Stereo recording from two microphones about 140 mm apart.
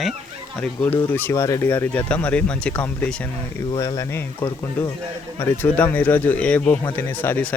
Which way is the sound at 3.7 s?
30° left (ahead or behind).